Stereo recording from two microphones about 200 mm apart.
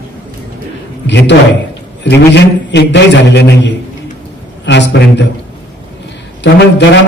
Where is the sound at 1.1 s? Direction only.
60° left (ahead or behind).